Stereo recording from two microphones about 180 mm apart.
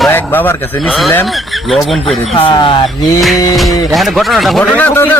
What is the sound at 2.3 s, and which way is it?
Speech, 30° left (ahead or behind).